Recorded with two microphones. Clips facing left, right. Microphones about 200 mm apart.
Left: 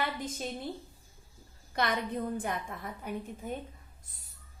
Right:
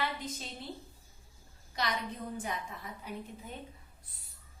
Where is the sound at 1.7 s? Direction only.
55° left (ahead or behind).